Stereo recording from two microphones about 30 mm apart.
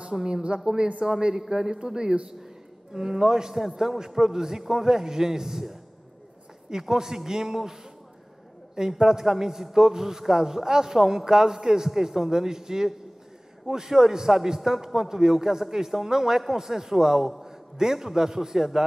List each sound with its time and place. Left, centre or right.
0.1 s a man's voice: centre
0.7 s a man's voice: right